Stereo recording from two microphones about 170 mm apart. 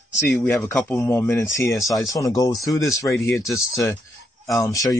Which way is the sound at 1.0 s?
15° left (ahead or behind).